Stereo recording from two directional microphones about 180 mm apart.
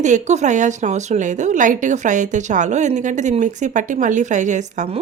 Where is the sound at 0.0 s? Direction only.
40° right (ahead or behind).